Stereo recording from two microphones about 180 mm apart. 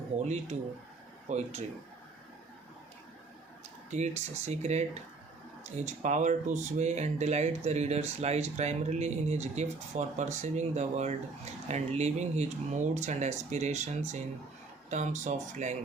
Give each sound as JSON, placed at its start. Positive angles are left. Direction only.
{"t": 0.2, "sound": "speech", "side_deg": -40}
{"t": 3.8, "sound": "speech", "side_deg": -40}